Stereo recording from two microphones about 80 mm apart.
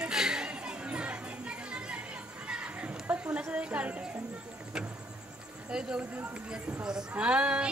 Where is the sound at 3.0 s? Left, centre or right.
Centre.